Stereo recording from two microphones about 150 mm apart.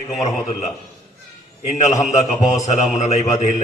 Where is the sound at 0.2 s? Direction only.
45° left (ahead or behind).